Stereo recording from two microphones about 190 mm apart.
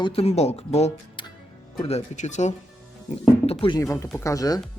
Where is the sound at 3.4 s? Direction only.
30° left (ahead or behind).